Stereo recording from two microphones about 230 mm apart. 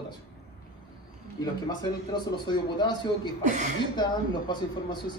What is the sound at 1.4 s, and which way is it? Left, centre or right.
Speech, centre.